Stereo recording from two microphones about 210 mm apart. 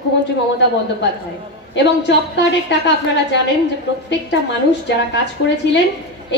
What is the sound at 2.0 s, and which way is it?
A woman's voice, 55° left (ahead or behind).